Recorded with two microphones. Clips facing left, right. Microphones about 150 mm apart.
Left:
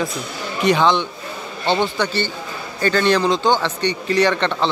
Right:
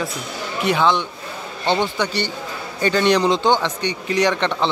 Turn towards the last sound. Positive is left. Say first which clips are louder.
# left 1 dB
turn(degrees=-15)  # may be behind; listen again after turning